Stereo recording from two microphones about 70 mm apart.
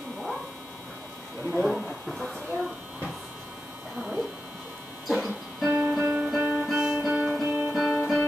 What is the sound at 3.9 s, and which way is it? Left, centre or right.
Speech, centre.